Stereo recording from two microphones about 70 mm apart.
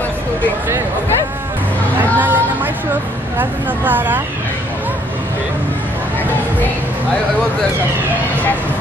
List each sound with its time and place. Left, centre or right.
2.1 s chatter: right
3.3 s speech: right